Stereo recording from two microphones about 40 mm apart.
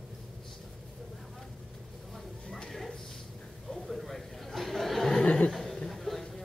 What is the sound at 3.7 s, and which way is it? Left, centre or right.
Chatter, centre.